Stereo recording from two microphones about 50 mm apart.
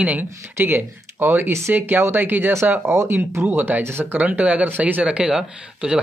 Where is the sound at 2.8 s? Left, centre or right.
Right.